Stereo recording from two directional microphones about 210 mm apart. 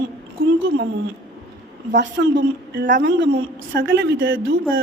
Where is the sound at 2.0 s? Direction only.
55° right (ahead or behind).